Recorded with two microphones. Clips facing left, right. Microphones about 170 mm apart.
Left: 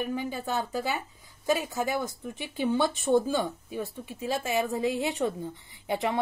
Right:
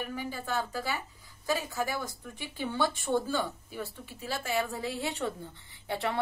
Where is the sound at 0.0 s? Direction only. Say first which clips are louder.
Left 5 dB; 20° left (ahead or behind).